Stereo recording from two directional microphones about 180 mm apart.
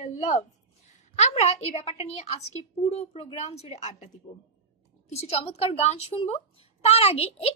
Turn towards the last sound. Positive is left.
turn(degrees=35)  # may be behind; listen again after turning